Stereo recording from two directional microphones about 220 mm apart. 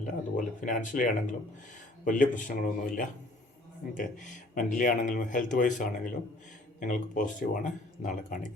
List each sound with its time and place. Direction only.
0.0 s speech: 35° left (ahead or behind)